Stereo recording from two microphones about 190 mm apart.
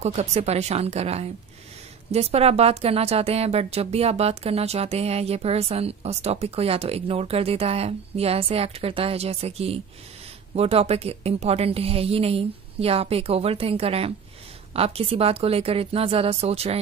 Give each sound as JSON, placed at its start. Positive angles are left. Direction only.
{"t": 0.0, "sound": "a woman's voice", "side_deg": -35}